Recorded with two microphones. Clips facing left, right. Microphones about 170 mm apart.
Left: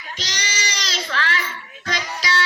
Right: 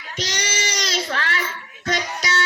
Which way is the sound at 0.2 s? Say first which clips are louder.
Right 5 dB; 50° right (ahead or behind).